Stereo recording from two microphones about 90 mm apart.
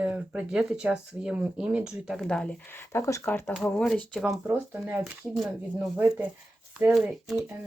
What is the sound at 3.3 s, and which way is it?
Speech, 15° left (ahead or behind).